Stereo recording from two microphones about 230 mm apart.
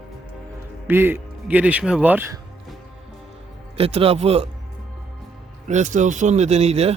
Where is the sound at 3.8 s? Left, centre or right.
Right.